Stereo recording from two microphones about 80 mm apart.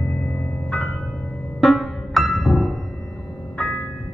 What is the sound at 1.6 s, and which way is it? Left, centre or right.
Music, centre.